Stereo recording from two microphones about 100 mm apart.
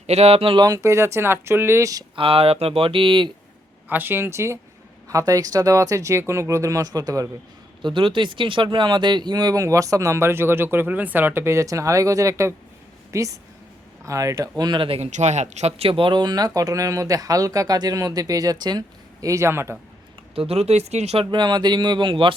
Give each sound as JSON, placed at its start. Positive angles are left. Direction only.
{"t": 0.1, "sound": "speech", "side_deg": -90}
{"t": 0.6, "sound": "speech", "side_deg": -35}
{"t": 2.1, "sound": "speech", "side_deg": -65}
{"t": 3.8, "sound": "speech", "side_deg": -20}
{"t": 7.8, "sound": "speech", "side_deg": -55}
{"t": 14.6, "sound": "speech", "side_deg": -45}
{"t": 14.8, "sound": "speech", "side_deg": -90}
{"t": 15.6, "sound": "speech", "side_deg": -70}
{"t": 19.2, "sound": "speech", "side_deg": -30}
{"t": 20.3, "sound": "speech", "side_deg": -75}
{"t": 21.2, "sound": "speech", "side_deg": -50}